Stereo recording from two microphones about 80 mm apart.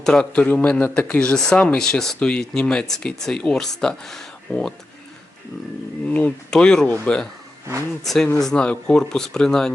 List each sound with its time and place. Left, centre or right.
0.0 s a man's voice: centre
4.5 s a man's voice: left
6.1 s a man's voice: centre
6.5 s speech: centre